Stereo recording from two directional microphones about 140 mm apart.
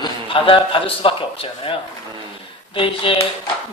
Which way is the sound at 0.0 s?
35° left (ahead or behind).